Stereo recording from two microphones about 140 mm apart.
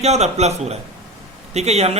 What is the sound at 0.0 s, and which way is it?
A man's voice, 50° right (ahead or behind).